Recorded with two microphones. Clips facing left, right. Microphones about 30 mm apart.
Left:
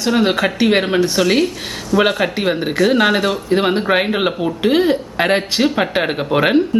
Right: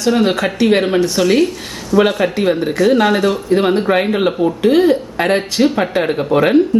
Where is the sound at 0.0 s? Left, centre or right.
Centre.